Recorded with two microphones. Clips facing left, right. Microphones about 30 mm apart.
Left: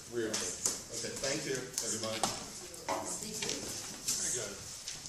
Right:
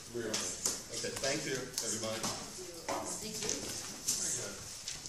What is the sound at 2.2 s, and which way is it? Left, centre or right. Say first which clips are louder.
Speech: left 4 dB; left.